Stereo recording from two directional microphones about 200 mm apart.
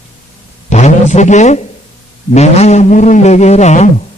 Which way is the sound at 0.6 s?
35° left (ahead or behind).